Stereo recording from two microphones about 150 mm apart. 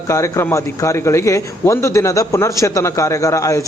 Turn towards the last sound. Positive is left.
turn(degrees=20)  # may be behind; listen again after turning